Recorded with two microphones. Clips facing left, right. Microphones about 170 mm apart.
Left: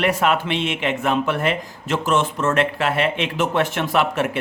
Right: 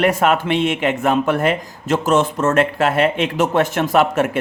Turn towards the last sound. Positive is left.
turn(degrees=-45)  # may be behind; listen again after turning